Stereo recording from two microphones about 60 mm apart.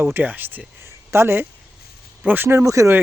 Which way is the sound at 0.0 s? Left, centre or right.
Right.